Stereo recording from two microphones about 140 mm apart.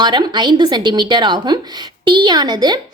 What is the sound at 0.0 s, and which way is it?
A woman's voice, 30° right (ahead or behind).